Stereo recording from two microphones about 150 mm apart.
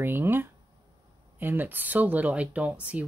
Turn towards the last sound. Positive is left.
turn(degrees=-10)  # may be behind; listen again after turning